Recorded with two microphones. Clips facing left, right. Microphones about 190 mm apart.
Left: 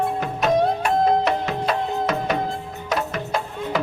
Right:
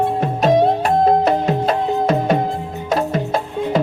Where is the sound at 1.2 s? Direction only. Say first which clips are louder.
Right 6 dB; 35° right (ahead or behind).